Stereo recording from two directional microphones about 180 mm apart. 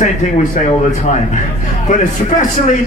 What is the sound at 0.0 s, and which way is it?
Speech, 45° left (ahead or behind).